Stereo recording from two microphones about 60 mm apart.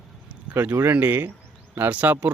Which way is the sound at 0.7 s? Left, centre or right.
Right.